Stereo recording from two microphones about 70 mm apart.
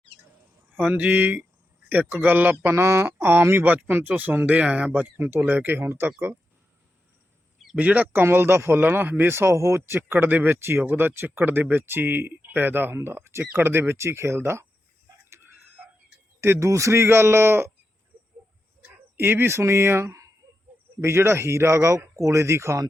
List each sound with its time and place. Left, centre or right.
0.9 s speech: right
5.0 s speech: right
7.8 s speech: right
8.2 s speech: right
9.3 s speech: right
10.0 s speech: right
15.3 s tick-tock: right
16.4 s speech: right
19.1 s speech: right